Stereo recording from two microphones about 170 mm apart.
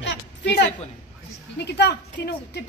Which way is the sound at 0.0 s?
90° left.